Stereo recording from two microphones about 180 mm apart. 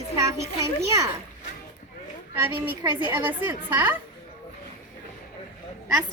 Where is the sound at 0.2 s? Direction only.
15° right (ahead or behind).